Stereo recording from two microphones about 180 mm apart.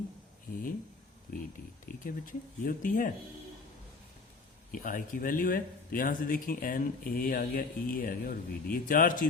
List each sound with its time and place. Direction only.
1.3 s speech: 50° left (ahead or behind)
4.7 s speech: 50° left (ahead or behind)